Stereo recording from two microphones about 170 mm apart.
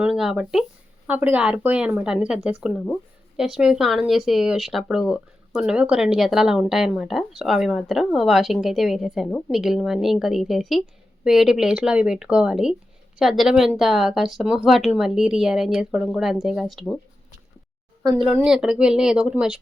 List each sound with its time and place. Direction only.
0.0 s a woman's voice: 5° right (ahead or behind)
18.0 s speech: 20° right (ahead or behind)
18.3 s a woman's voice: 5° right (ahead or behind)